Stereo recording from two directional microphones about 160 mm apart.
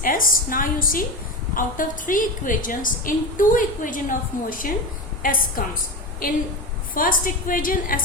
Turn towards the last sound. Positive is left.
turn(degrees=60)  # may be behind; listen again after turning